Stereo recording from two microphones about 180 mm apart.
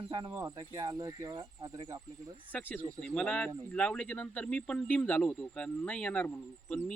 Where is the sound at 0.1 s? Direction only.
20° right (ahead or behind).